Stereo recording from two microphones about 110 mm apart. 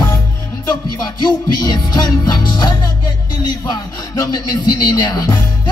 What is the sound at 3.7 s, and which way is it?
Music, 35° left (ahead or behind).